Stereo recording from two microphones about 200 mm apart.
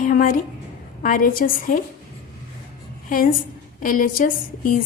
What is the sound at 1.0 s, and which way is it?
Speech, 45° left (ahead or behind).